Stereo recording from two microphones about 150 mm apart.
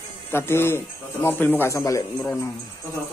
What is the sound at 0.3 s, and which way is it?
A man's voice, 15° left (ahead or behind).